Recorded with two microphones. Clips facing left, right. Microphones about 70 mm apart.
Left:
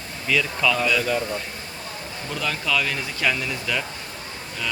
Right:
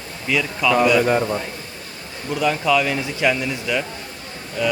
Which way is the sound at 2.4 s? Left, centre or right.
Centre.